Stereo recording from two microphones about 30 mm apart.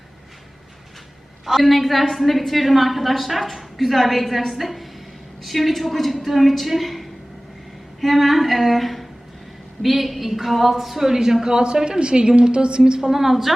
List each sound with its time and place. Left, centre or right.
1.5 s a woman's voice: centre
11.4 s a woman's voice: right; by 13.5 s centre